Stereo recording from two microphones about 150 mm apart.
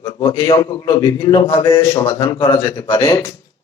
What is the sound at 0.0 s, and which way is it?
A man's voice, 30° left (ahead or behind).